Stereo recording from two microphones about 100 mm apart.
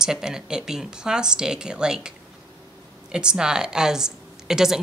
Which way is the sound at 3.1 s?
10° right (ahead or behind).